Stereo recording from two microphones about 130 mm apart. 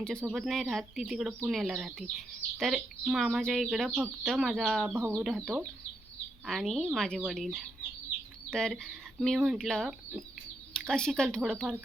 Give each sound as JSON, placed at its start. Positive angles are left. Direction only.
{"t": 0.3, "sound": "speech", "side_deg": 0}
{"t": 4.9, "sound": "speech", "side_deg": -20}
{"t": 5.2, "sound": "speech", "side_deg": 0}